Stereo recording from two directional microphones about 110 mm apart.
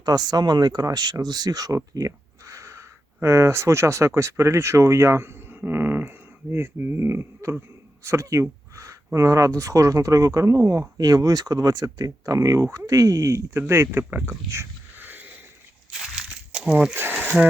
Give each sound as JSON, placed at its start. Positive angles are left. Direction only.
{"t": 0.0, "sound": "speech", "side_deg": -35}
{"t": 16.5, "sound": "a sound", "side_deg": -10}
{"t": 16.9, "sound": "speech", "side_deg": -20}